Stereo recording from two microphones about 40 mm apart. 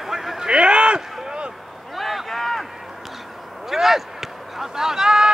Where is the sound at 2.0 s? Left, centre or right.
Centre.